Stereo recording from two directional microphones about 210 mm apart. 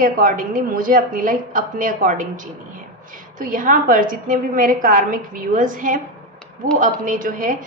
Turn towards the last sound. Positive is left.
turn(degrees=-40)  # may be behind; listen again after turning